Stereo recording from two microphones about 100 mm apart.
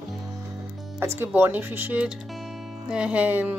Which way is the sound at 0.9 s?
25° right (ahead or behind).